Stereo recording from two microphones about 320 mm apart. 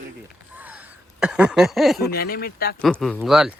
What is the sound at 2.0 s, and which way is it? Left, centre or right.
Speech, left.